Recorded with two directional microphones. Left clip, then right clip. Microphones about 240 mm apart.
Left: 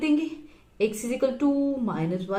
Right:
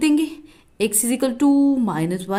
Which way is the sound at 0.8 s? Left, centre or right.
Right.